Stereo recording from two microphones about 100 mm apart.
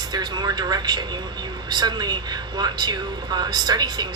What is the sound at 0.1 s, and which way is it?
Speech, 45° right (ahead or behind).